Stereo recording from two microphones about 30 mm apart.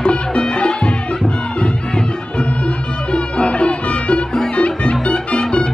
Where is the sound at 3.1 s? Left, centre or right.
Left.